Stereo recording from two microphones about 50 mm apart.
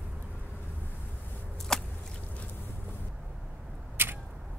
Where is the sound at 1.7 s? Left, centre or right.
Centre.